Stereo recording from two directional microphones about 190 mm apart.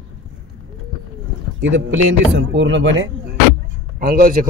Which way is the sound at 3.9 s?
50° right (ahead or behind).